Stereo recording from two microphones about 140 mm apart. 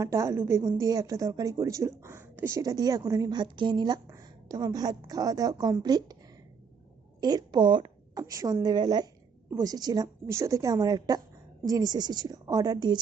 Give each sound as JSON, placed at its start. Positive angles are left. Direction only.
{"t": 0.0, "sound": "a woman's voice", "side_deg": -20}
{"t": 7.2, "sound": "a woman's voice", "side_deg": -30}